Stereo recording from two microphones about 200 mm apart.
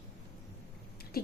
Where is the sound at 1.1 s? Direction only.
50° left (ahead or behind).